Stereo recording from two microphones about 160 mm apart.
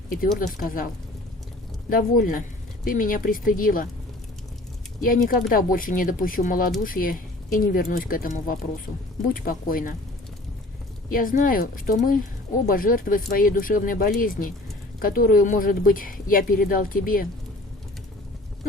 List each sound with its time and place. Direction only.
0.3 s speech: 60° left (ahead or behind)
1.9 s speech: 60° left (ahead or behind)
4.9 s speech: 55° left (ahead or behind)
11.1 s speech: 60° left (ahead or behind)